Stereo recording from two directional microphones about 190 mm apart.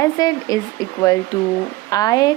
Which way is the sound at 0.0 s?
20° left (ahead or behind).